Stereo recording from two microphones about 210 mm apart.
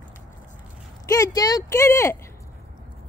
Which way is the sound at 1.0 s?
15° left (ahead or behind).